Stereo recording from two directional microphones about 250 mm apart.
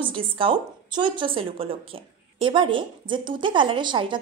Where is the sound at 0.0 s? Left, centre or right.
Right.